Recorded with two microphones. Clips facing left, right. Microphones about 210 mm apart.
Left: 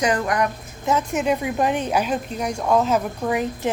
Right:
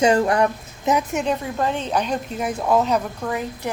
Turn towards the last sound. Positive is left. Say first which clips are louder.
# left 4 dB
turn(degrees=20)  # may be behind; listen again after turning